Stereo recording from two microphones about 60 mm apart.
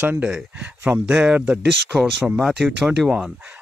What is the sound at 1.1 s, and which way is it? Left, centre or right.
Speech, centre.